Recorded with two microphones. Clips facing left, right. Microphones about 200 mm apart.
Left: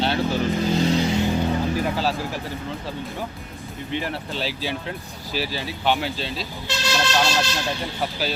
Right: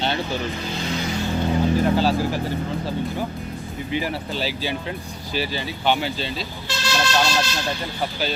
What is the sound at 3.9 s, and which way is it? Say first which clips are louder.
Speech: right 2 dB; 5° right (ahead or behind).